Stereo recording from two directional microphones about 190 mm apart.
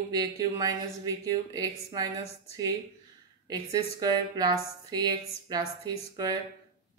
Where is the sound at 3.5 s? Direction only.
20° right (ahead or behind).